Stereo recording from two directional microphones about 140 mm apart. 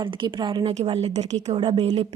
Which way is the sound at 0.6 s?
45° right (ahead or behind).